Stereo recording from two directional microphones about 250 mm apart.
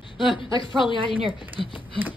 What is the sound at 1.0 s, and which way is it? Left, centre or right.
Speech, right.